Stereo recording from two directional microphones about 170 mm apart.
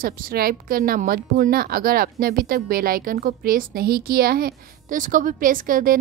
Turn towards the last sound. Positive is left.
turn(degrees=-55)  # may be behind; listen again after turning